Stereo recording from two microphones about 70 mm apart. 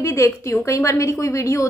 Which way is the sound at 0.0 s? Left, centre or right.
Left.